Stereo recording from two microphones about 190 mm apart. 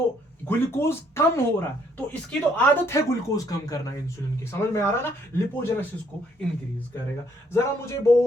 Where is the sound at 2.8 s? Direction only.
15° left (ahead or behind).